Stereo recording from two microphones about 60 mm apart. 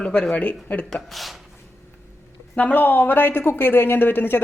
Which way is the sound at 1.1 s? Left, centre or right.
Centre.